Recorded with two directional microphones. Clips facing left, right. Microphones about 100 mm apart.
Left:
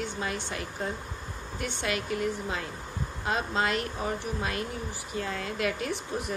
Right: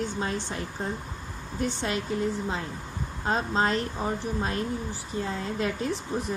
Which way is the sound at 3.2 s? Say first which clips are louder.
Right 3 dB; 35° right (ahead or behind).